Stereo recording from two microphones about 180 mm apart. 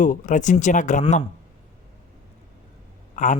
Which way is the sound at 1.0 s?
30° left (ahead or behind).